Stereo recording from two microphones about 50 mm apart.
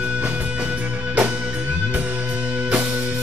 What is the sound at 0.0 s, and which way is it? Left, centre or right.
Music, right.